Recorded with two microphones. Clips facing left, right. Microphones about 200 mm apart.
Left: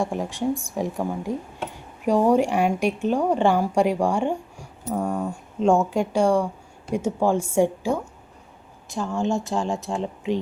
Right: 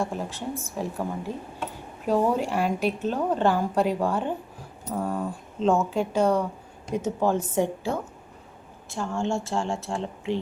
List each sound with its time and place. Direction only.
0.0 s a woman's voice: 15° left (ahead or behind)